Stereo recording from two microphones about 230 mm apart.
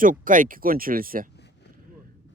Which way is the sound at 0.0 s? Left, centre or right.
Right.